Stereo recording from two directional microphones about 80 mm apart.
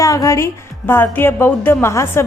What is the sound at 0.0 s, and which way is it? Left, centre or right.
A woman's voice, left.